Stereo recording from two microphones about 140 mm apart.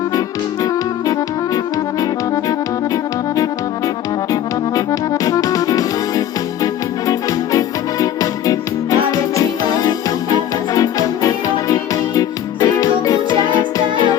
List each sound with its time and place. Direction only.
2.0 s music: 25° left (ahead or behind)